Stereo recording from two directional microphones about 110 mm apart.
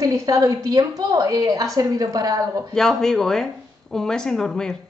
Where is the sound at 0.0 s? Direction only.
30° right (ahead or behind).